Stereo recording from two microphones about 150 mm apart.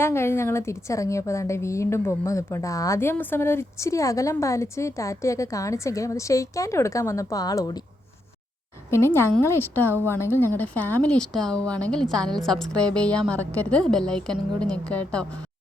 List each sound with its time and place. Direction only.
0.0 s a woman's voice: 15° left (ahead or behind)
8.9 s speech: 15° left (ahead or behind)